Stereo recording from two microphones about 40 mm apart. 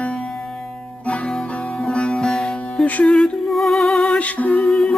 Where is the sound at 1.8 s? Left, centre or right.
Left.